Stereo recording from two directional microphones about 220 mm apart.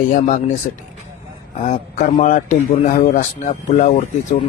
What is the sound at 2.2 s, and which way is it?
Speech, 35° left (ahead or behind).